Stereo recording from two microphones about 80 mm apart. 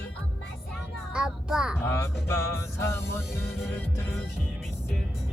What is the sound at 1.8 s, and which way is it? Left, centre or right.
Music, left.